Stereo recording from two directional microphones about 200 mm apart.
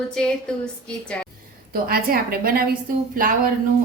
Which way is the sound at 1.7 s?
50° right (ahead or behind).